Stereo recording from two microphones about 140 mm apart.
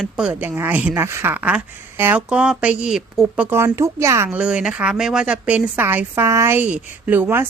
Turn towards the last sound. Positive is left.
turn(degrees=-15)  # may be behind; listen again after turning